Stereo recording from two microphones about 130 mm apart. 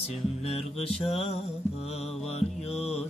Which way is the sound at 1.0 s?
50° left (ahead or behind).